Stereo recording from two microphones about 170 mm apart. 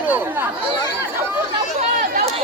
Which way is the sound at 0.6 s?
25° left (ahead or behind).